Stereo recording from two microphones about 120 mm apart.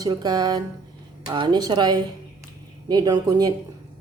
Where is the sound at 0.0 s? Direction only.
35° right (ahead or behind).